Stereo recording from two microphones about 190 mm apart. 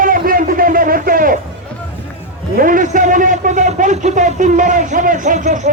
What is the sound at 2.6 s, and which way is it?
A man's voice, 45° right (ahead or behind).